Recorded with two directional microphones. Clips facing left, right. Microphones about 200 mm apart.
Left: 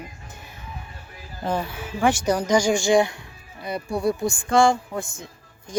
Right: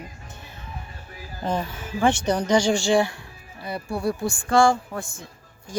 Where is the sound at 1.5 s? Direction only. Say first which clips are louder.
Left 1 dB; 10° left (ahead or behind).